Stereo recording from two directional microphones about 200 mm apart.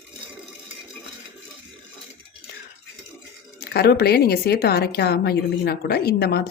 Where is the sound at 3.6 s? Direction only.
55° left (ahead or behind).